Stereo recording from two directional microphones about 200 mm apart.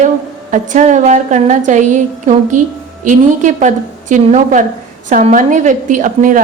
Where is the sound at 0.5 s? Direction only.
40° right (ahead or behind).